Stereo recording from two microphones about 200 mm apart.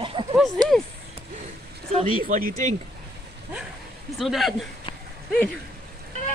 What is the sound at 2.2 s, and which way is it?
Speech, 45° right (ahead or behind).